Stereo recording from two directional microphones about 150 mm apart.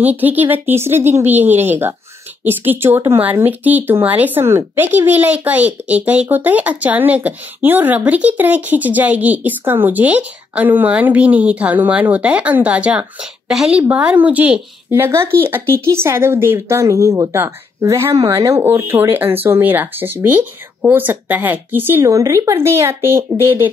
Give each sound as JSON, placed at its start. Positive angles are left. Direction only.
{"t": 0.0, "sound": "speech", "side_deg": -10}